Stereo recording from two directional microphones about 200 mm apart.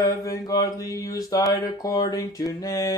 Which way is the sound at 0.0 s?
15° left (ahead or behind).